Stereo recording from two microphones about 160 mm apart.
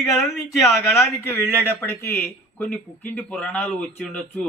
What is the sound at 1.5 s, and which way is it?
Speech, 15° left (ahead or behind).